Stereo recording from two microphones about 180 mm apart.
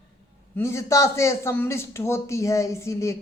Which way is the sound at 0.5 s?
15° left (ahead or behind).